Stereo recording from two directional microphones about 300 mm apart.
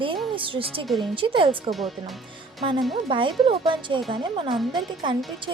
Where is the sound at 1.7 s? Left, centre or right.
Centre.